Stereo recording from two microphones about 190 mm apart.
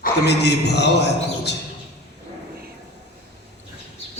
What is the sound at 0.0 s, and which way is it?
A man's voice, 60° left (ahead or behind).